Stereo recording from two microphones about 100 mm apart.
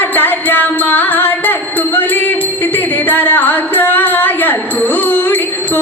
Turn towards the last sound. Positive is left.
turn(degrees=20)  # may be behind; listen again after turning